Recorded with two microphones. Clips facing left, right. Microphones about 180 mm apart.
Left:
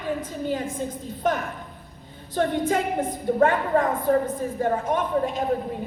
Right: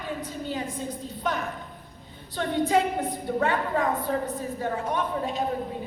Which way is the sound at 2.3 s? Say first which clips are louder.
Left 1 dB; 50° left (ahead or behind).